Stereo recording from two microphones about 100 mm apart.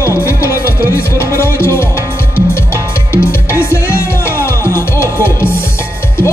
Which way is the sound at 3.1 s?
25° left (ahead or behind).